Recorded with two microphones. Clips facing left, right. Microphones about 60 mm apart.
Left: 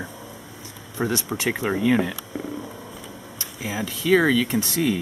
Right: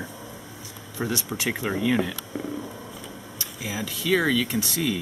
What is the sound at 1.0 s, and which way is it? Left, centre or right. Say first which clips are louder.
Speech: left 4 dB; left.